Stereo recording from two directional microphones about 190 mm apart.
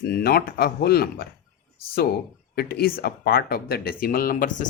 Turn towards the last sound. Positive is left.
turn(degrees=50)  # may be behind; listen again after turning